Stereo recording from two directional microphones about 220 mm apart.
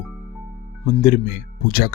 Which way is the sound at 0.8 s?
35° left (ahead or behind).